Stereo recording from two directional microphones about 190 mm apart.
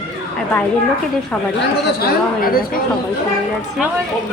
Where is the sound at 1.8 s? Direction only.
50° left (ahead or behind).